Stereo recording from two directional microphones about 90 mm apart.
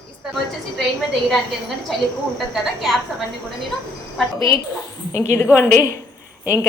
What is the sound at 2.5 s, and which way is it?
Speech, centre (ahead or behind).